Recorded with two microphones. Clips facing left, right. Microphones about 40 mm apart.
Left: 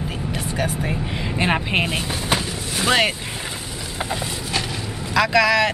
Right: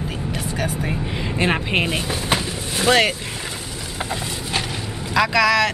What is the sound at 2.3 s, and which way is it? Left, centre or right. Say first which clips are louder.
Vehicle: even; centre.